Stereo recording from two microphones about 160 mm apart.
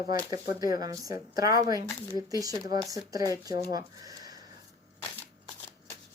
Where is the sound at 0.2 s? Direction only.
25° right (ahead or behind).